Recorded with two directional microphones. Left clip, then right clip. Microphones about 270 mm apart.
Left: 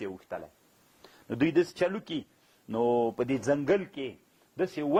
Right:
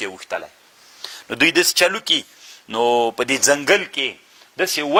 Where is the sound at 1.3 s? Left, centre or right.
Centre.